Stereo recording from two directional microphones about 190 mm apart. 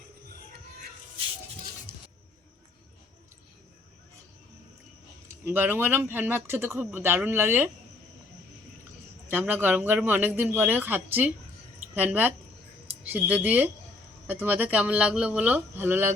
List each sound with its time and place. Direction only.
1.9 s a sound: 50° right (ahead or behind)
5.3 s speech: 10° right (ahead or behind)
9.3 s speech: 10° right (ahead or behind)